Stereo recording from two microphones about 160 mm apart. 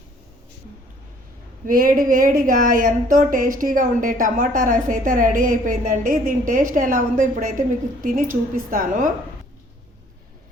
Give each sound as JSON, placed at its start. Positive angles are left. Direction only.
{"t": 1.6, "sound": "speech", "side_deg": -60}